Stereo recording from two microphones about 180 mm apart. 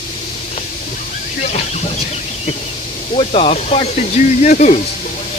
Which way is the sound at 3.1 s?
35° left (ahead or behind).